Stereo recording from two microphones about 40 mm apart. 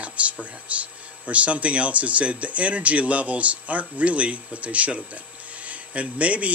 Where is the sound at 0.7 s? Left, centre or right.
Right.